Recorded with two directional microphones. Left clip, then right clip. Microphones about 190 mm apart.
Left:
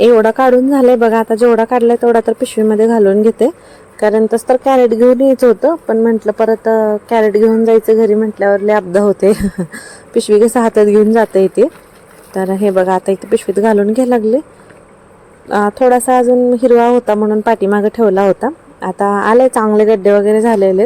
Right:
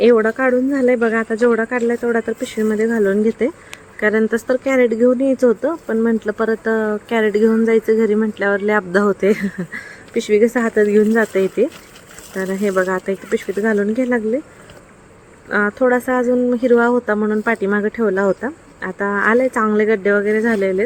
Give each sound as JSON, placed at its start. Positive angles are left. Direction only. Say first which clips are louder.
{"t": 0.2, "sound": "a woman's voice", "louder": "left 7 dB", "side_deg": 15}
{"t": 4.0, "sound": "a woman's voice", "louder": "left 6 dB", "side_deg": 5}
{"t": 9.2, "sound": "speech", "louder": "left 5 dB", "side_deg": 20}
{"t": 9.6, "sound": "a woman's voice", "louder": "left 4 dB", "side_deg": 0}
{"t": 12.3, "sound": "a woman's voice", "louder": "left 6 dB", "side_deg": 5}
{"t": 15.6, "sound": "a woman's voice", "louder": "left 7 dB", "side_deg": 10}